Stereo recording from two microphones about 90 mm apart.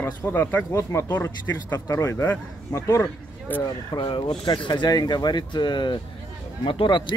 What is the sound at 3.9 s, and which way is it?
Speech, 70° left (ahead or behind).